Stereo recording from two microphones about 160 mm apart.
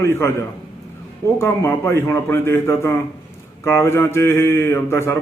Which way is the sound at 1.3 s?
15° left (ahead or behind).